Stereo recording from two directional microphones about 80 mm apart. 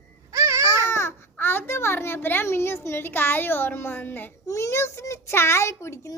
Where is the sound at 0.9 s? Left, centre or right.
Left.